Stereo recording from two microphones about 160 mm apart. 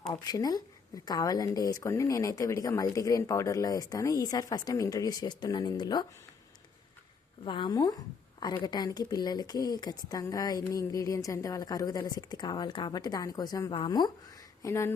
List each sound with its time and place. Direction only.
0.1 s speech: 25° left (ahead or behind)
7.4 s speech: 30° left (ahead or behind)
14.6 s speech: 20° left (ahead or behind)